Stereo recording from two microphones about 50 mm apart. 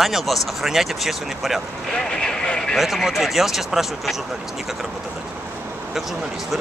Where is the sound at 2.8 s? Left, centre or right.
Centre.